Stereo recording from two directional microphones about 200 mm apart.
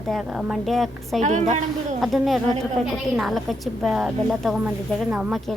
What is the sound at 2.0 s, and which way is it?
A woman's voice, centre (ahead or behind).